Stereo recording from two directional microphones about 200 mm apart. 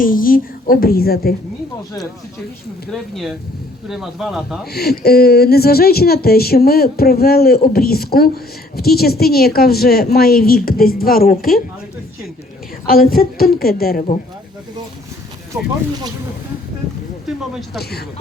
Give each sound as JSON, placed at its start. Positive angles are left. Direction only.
{"t": 0.0, "sound": "speech", "side_deg": 45}
{"t": 2.9, "sound": "speech", "side_deg": 0}
{"t": 4.7, "sound": "speech", "side_deg": 50}
{"t": 12.9, "sound": "speech", "side_deg": 45}
{"t": 17.2, "sound": "speech", "side_deg": 0}